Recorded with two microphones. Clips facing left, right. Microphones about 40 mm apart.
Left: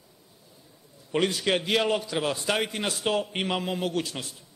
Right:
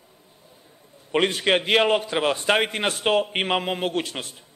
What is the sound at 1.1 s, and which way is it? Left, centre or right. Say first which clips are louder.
A man's voice: right 4 dB; right.